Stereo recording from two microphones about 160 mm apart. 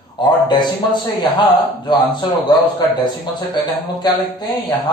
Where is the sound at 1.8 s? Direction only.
30° left (ahead or behind).